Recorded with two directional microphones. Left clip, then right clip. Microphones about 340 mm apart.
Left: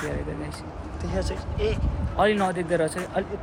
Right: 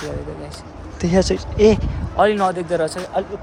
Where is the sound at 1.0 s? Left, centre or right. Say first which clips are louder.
Right 13 dB; centre.